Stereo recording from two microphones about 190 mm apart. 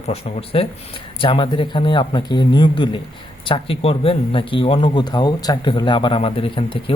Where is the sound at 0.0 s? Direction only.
30° left (ahead or behind).